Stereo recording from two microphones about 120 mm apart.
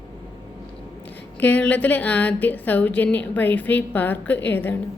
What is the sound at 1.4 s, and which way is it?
A woman's voice, 15° left (ahead or behind).